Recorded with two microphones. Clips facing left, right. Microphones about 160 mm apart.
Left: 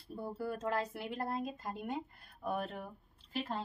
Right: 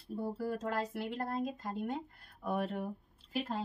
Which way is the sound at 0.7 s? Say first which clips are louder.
Even; 5° left (ahead or behind).